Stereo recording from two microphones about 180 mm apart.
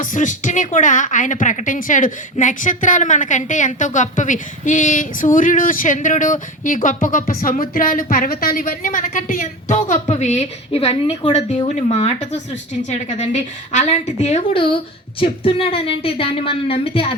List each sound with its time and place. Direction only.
0.0 s a woman's voice: 45° left (ahead or behind)